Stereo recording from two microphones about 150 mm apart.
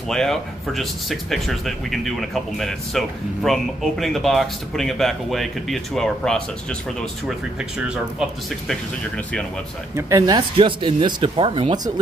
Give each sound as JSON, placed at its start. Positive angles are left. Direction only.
{"t": 0.1, "sound": "speech", "side_deg": 5}
{"t": 9.1, "sound": "speech", "side_deg": 10}
{"t": 9.9, "sound": "speech", "side_deg": -20}